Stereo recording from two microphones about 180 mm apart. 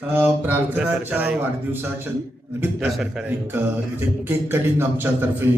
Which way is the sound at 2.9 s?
Centre (ahead or behind).